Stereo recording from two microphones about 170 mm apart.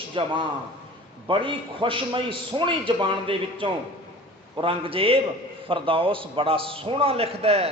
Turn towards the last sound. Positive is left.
turn(degrees=-35)  # may be behind; listen again after turning